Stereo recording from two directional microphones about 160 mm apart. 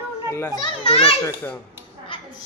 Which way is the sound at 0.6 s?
35° left (ahead or behind).